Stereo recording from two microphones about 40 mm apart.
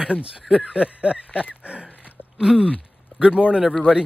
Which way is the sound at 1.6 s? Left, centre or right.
Right.